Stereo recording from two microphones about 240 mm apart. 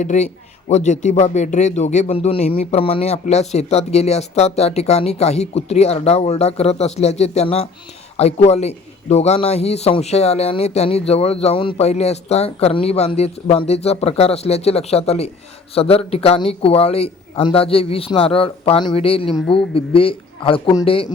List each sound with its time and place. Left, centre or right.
0.0 s a man's voice: left
19.3 s a man's voice: centre
19.7 s a man's voice: left